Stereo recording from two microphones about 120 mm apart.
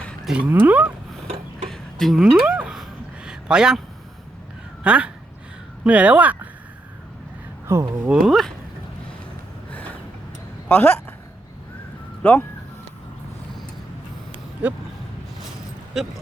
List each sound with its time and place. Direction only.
0.4 s speech: 15° right (ahead or behind)
1.7 s a sound: centre (ahead or behind)
4.8 s speech: 10° right (ahead or behind)
7.7 s speech: 20° right (ahead or behind)
8.1 s speech: centre (ahead or behind)
10.7 s speech: 15° left (ahead or behind)
12.2 s speech: 15° left (ahead or behind)
15.9 s speech: 5° right (ahead or behind)